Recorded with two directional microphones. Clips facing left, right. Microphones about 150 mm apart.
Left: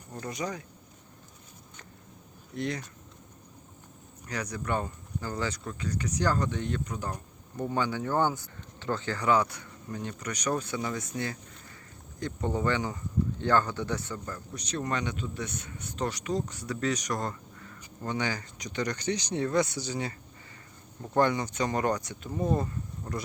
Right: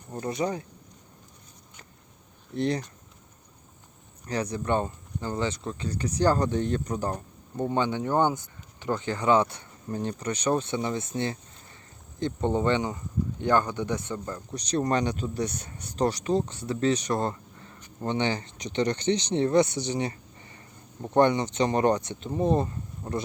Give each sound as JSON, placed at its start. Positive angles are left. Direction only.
{"t": 0.1, "sound": "speech", "side_deg": -30}
{"t": 2.6, "sound": "speech", "side_deg": -30}
{"t": 4.3, "sound": "speech", "side_deg": -30}
{"t": 14.5, "sound": "speech", "side_deg": -35}